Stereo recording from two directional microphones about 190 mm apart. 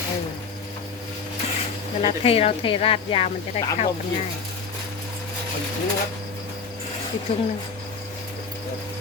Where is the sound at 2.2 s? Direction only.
30° left (ahead or behind).